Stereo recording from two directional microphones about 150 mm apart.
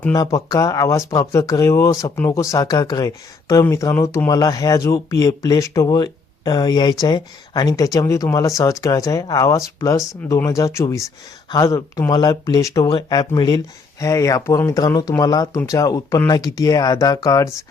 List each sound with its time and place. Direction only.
0.1 s speech: 20° left (ahead or behind)